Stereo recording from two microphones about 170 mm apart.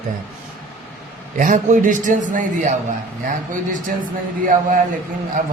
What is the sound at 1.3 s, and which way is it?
Speech, 45° right (ahead or behind).